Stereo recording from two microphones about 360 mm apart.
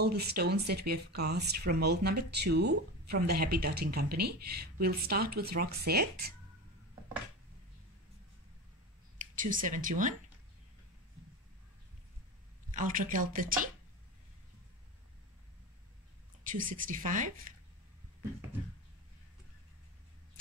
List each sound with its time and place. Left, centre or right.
0.0 s speech: right
9.2 s speech: right
12.7 s speech: right
16.4 s speech: right